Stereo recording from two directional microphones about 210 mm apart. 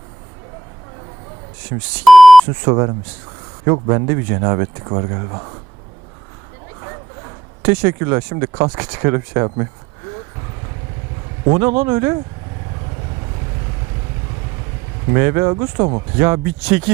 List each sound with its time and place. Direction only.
1.7 s speech: 15° right (ahead or behind)
2.0 s beep: centre (ahead or behind)
2.6 s speech: 20° right (ahead or behind)
7.6 s speech: 15° right (ahead or behind)
11.8 s speech: 15° right (ahead or behind)
15.1 s speech: 15° right (ahead or behind)
16.1 s speech: 15° right (ahead or behind)